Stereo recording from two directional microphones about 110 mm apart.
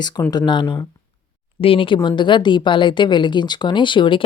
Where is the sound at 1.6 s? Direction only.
55° left (ahead or behind).